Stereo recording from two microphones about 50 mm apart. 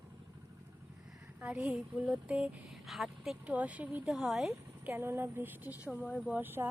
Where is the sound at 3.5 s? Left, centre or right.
Right.